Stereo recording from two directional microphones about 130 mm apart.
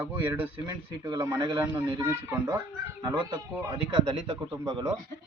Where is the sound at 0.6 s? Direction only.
30° right (ahead or behind).